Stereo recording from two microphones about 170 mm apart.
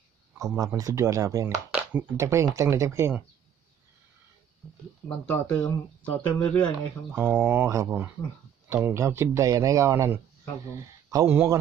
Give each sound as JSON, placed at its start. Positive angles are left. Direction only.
{"t": 0.4, "sound": "speech", "side_deg": -20}
{"t": 5.2, "sound": "speech", "side_deg": 5}
{"t": 7.1, "sound": "speech", "side_deg": -10}